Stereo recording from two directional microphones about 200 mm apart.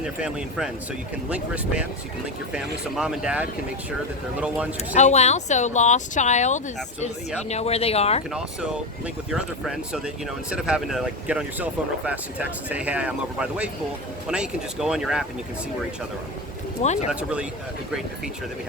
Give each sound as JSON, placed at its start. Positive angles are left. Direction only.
{"t": 0.0, "sound": "speech", "side_deg": -5}
{"t": 4.9, "sound": "speech", "side_deg": 35}
{"t": 9.3, "sound": "speech", "side_deg": -5}
{"t": 16.8, "sound": "speech", "side_deg": 35}
{"t": 17.1, "sound": "speech", "side_deg": -5}